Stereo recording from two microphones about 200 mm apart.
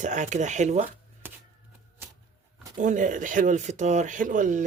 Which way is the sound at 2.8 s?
40° right (ahead or behind).